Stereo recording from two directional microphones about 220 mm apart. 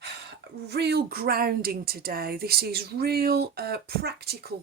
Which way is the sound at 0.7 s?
50° right (ahead or behind).